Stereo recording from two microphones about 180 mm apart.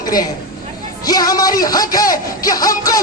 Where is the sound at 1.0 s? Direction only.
20° left (ahead or behind).